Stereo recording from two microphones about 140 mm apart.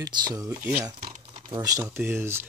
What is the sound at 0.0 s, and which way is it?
Speech, 30° right (ahead or behind).